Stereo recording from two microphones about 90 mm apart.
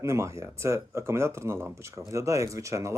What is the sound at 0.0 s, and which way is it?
Speech, 35° right (ahead or behind).